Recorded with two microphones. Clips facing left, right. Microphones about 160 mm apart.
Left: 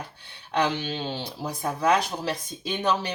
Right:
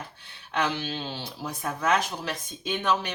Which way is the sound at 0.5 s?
35° left (ahead or behind).